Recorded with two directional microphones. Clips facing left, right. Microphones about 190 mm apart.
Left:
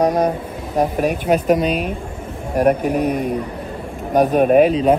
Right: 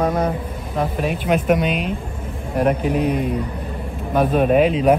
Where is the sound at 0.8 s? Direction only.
45° left (ahead or behind).